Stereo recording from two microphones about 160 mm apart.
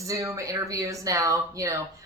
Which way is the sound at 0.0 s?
20° right (ahead or behind).